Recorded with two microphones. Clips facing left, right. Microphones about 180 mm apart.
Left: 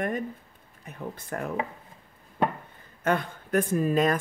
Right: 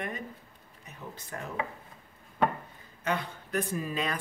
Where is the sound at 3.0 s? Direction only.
50° left (ahead or behind).